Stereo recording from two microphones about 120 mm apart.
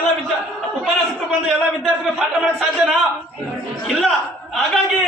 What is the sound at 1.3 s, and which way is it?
A man's voice, 5° right (ahead or behind).